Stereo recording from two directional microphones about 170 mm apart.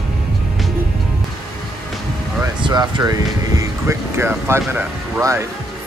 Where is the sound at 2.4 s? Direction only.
25° right (ahead or behind).